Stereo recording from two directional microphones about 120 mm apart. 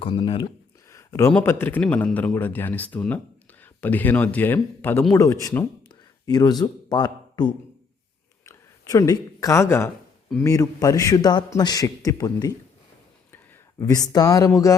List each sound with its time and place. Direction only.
0.0 s a man's voice: 40° left (ahead or behind)
0.9 s a sound: 25° left (ahead or behind)
1.3 s a man's voice: 15° left (ahead or behind)